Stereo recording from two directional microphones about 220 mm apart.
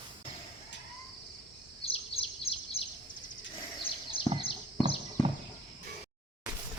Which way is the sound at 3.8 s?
25° left (ahead or behind).